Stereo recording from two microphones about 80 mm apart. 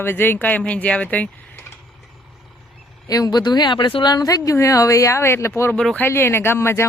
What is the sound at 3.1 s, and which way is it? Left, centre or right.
Speech, left.